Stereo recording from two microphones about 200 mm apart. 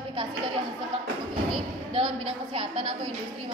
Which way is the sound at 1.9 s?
25° right (ahead or behind).